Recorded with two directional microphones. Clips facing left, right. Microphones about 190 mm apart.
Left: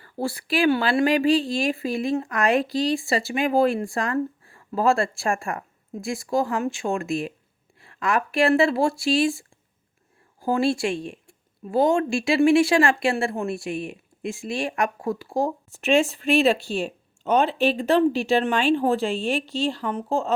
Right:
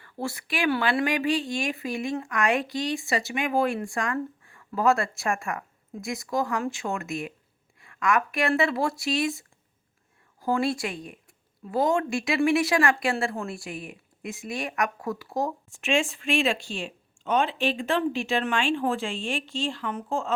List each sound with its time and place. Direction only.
0.0 s speech: 35° left (ahead or behind)